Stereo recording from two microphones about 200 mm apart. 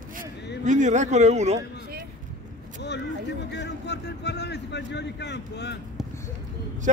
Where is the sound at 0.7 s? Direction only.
35° right (ahead or behind).